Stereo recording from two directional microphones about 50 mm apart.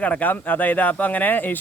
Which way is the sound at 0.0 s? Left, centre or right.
Left.